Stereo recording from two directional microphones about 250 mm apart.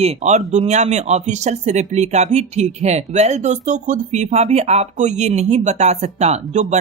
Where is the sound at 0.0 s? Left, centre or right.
Right.